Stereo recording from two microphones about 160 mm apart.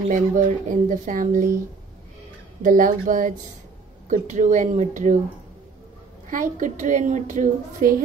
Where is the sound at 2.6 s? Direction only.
55° right (ahead or behind).